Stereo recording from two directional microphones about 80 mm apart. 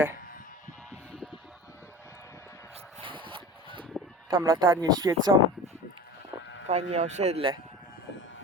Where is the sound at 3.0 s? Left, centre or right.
Right.